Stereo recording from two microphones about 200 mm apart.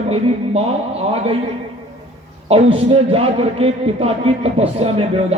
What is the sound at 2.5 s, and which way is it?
A man's voice, 30° right (ahead or behind).